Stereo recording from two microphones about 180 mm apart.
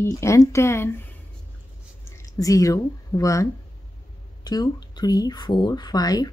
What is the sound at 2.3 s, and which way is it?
Speech, 20° left (ahead or behind).